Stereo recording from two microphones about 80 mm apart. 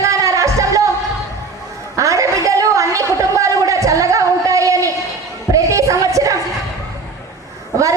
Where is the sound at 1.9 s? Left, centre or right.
Right.